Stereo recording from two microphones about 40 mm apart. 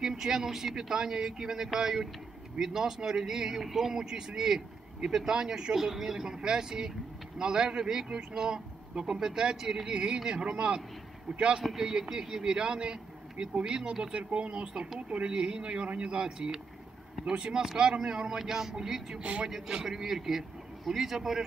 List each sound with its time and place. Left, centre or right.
0.0 s speech: centre
14.1 s speech: right
16.3 s speech: centre
18.4 s speech: centre